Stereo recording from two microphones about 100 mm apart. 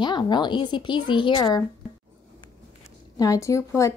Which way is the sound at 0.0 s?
50° left (ahead or behind).